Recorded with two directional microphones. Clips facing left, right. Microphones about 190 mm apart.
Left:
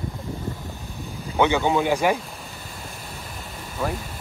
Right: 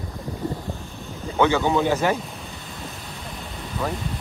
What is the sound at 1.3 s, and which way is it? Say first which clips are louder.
Speech: even; 15° left (ahead or behind).